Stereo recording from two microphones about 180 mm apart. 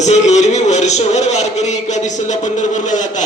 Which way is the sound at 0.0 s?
40° left (ahead or behind).